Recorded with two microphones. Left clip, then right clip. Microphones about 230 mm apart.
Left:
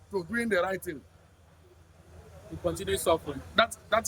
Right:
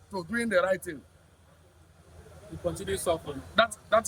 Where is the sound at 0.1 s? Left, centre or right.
Centre.